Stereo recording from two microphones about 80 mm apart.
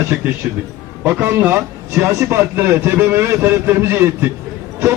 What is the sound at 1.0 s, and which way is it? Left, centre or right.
Speech, right.